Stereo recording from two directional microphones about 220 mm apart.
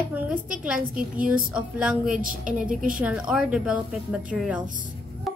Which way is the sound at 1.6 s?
5° right (ahead or behind).